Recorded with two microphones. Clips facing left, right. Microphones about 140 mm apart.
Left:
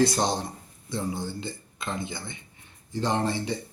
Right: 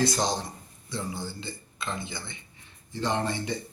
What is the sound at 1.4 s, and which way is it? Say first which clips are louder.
Speech: left 2 dB; 45° left (ahead or behind).